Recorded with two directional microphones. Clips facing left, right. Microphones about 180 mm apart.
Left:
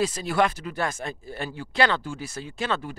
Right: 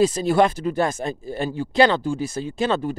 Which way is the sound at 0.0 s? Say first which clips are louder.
Right 6 dB; 25° right (ahead or behind).